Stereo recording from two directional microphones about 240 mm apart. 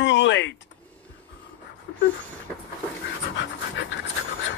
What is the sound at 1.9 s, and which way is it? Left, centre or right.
Dog, left.